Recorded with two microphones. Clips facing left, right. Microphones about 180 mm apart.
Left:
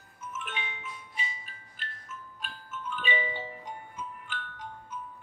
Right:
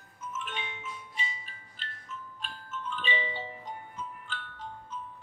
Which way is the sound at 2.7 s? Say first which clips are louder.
Left 1 dB; 10° left (ahead or behind).